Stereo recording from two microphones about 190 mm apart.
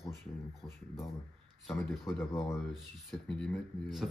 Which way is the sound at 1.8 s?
Centre (ahead or behind).